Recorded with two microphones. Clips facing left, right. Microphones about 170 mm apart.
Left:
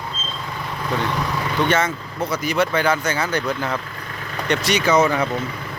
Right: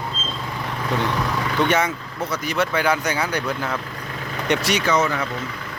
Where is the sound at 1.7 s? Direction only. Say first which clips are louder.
Left 1 dB; 15° right (ahead or behind).